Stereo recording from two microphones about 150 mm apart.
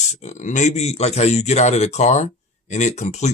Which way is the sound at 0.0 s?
50° left (ahead or behind).